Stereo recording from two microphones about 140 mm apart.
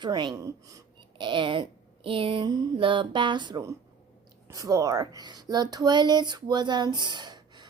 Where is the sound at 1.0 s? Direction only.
35° right (ahead or behind).